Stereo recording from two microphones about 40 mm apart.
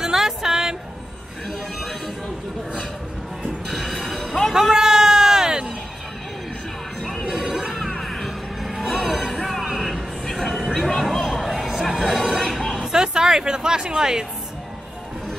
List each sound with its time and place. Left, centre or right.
0.0 s a sound: centre
1.5 s music: centre
3.7 s music: centre
4.6 s a sound: centre
7.0 s music: centre
7.2 s smash: centre
7.9 s music: centre
9.8 s train: centre
10.7 s music: centre
12.8 s speech: centre